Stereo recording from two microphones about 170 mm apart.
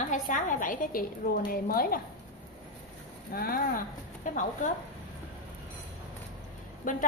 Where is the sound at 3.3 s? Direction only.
60° left (ahead or behind).